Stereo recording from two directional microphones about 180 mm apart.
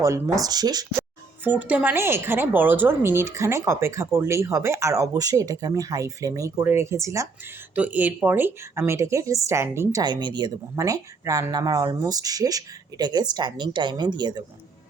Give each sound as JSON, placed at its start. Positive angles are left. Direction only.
{"t": 0.4, "sound": "a woman's voice", "side_deg": -20}
{"t": 1.5, "sound": "a woman's voice", "side_deg": -10}